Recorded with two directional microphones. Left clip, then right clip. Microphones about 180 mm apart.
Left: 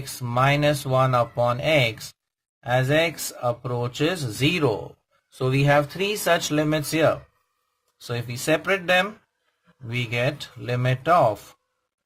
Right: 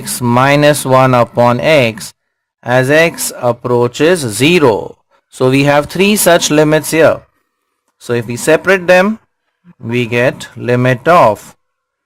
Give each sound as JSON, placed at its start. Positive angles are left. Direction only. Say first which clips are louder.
{"t": 0.0, "sound": "speech", "louder": "right 11 dB", "side_deg": -40}